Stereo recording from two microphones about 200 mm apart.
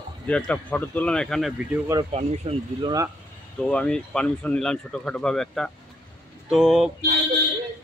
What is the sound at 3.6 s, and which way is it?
A man's voice, 5° left (ahead or behind).